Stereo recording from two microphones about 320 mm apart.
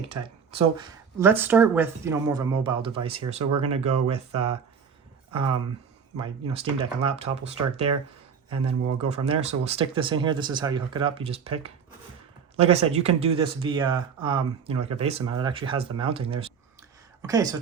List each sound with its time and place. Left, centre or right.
0.8 s speech: centre
6.1 s speech: centre
7.9 s speech: right
8.6 s speech: centre